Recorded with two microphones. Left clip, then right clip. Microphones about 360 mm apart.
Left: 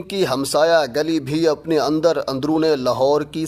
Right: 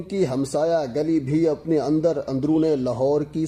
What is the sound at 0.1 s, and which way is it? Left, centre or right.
A man's voice, left.